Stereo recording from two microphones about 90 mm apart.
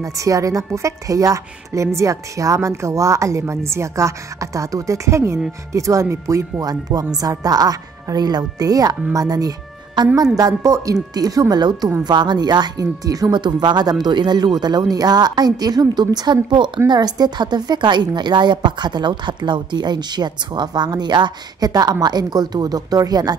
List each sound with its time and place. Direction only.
0.0 s a woman's voice: 35° right (ahead or behind)
13.4 s a woman's voice: 55° right (ahead or behind)